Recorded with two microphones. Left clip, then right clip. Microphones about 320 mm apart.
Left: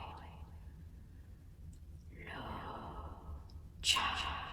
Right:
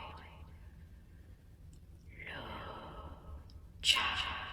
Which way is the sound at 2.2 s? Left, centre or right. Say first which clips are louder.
Right 1 dB; centre.